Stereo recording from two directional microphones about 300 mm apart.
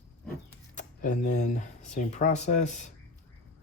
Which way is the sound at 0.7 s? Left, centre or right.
Left.